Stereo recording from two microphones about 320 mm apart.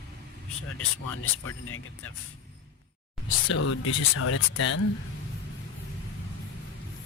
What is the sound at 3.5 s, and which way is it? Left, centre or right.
Speech, left.